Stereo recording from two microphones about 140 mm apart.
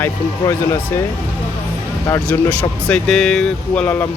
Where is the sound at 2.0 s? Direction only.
15° left (ahead or behind).